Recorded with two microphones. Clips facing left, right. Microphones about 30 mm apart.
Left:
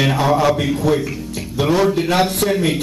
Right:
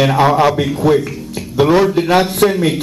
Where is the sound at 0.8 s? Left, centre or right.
Centre.